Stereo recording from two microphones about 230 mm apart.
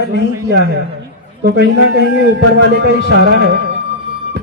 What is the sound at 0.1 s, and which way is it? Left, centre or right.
A man's voice, right.